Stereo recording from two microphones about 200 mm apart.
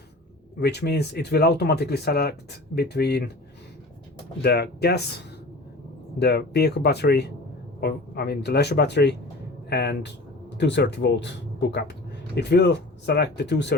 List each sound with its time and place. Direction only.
0.6 s speech: 55° left (ahead or behind)
4.4 s speech: 55° left (ahead or behind)
6.1 s speech: 55° left (ahead or behind)